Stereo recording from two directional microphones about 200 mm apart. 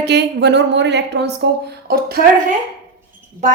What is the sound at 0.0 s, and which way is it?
Speech, 55° right (ahead or behind).